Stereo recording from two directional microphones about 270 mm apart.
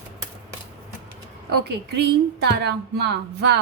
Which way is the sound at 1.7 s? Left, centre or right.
Right.